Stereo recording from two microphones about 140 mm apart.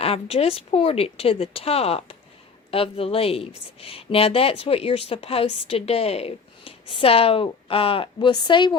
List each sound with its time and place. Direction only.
0.0 s a woman's voice: 45° left (ahead or behind)